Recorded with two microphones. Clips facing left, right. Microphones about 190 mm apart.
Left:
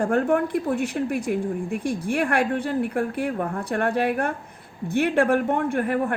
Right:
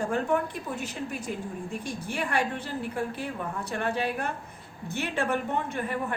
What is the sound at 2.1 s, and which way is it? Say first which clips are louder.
Speech: left 6 dB; 60° left (ahead or behind).